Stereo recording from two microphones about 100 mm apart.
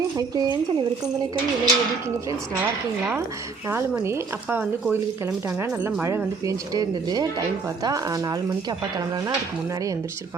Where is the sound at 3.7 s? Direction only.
20° right (ahead or behind).